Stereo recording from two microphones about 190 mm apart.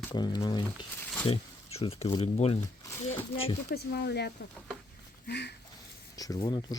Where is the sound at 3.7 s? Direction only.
55° left (ahead or behind).